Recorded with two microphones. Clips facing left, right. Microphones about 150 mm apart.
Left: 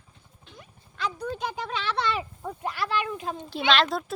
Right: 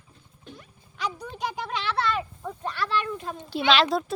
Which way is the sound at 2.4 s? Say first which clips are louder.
Even; 10° left (ahead or behind).